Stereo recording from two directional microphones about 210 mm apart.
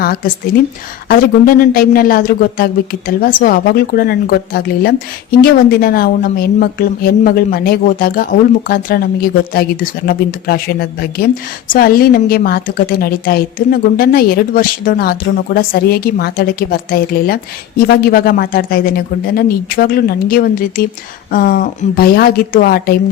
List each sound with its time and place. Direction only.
0.0 s speech: 45° left (ahead or behind)